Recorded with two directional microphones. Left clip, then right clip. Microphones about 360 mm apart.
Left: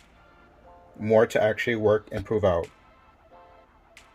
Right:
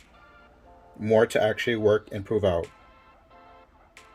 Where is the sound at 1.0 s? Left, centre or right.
Centre.